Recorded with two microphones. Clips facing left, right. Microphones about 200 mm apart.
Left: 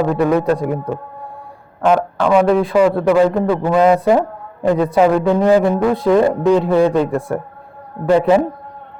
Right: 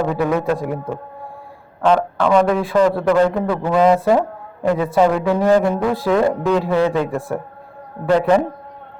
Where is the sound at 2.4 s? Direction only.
Centre (ahead or behind).